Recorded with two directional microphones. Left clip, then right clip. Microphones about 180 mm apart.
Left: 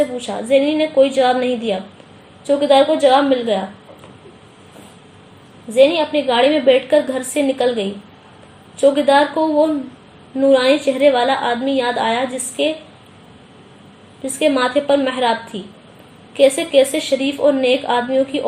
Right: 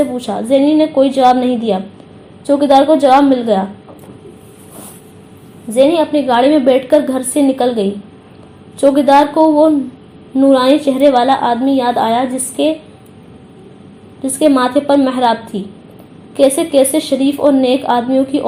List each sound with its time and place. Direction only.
0.3 s a woman's voice: 35° right (ahead or behind)
5.7 s a woman's voice: 35° right (ahead or behind)
14.3 s a woman's voice: 30° right (ahead or behind)